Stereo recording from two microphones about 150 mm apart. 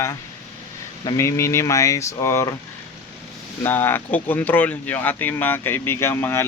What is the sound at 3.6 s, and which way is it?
Speech, 15° left (ahead or behind).